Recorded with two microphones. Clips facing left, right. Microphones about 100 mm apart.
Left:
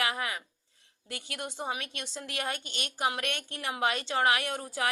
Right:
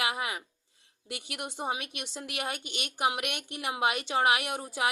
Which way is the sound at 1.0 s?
20° right (ahead or behind).